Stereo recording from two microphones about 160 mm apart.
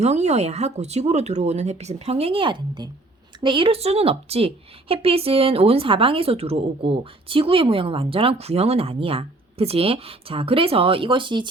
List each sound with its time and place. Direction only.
0.0 s a woman's voice: 45° right (ahead or behind)